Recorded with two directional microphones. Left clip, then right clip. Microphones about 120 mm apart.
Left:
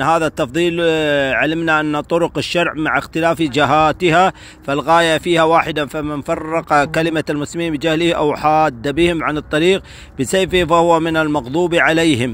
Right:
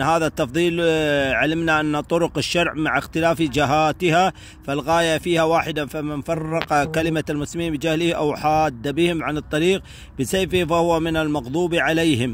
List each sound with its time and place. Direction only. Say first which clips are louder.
0.0 s speech: left 4 dB; 35° right (ahead or behind)